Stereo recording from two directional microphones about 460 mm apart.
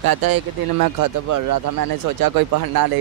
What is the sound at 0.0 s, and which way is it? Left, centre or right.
Speech, right.